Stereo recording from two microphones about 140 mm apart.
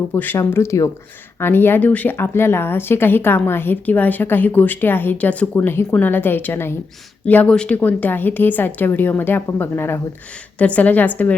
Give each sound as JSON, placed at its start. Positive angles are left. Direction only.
{"t": 0.1, "sound": "speech", "side_deg": 15}